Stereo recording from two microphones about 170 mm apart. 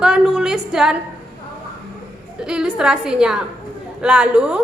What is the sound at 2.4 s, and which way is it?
A woman's voice, 5° right (ahead or behind).